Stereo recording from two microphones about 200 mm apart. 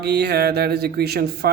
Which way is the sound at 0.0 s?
55° right (ahead or behind).